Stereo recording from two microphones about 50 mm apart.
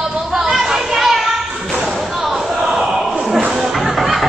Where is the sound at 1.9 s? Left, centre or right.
Centre.